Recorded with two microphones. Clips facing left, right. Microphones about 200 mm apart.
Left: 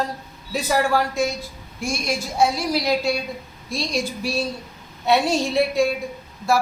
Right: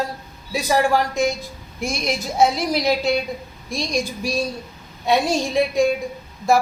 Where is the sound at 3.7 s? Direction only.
15° right (ahead or behind).